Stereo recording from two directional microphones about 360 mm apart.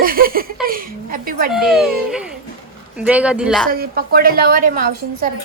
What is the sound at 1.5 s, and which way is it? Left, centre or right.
Speech, centre.